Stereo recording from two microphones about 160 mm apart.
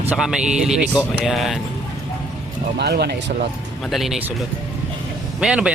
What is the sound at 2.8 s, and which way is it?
Speech, 90° right.